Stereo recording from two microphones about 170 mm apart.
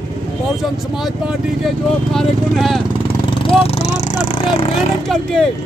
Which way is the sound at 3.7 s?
40° left (ahead or behind).